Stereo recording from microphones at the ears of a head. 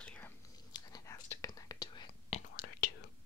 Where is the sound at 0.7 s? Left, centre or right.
Left.